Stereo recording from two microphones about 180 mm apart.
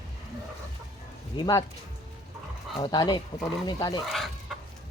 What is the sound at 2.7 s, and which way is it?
Speech, 25° left (ahead or behind).